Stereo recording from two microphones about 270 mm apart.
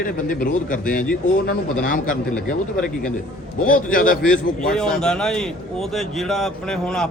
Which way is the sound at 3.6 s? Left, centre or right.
Left.